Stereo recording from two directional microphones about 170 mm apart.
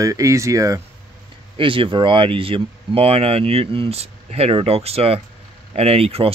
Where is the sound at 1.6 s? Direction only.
30° right (ahead or behind).